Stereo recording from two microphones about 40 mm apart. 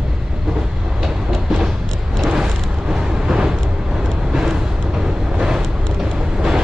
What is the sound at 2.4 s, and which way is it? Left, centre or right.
Vehicle, centre.